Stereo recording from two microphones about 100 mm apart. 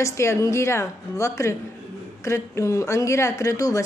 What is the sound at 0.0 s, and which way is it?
A woman's voice, 30° left (ahead or behind).